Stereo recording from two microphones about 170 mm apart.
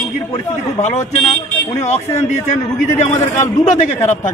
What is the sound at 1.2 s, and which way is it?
A man's voice, 35° left (ahead or behind).